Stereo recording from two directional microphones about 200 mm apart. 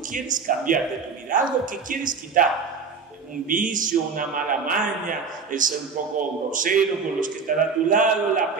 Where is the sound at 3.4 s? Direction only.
40° right (ahead or behind).